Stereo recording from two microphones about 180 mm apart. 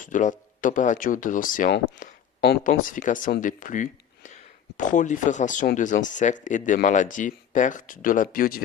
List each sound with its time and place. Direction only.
0.0 s speech: 45° left (ahead or behind)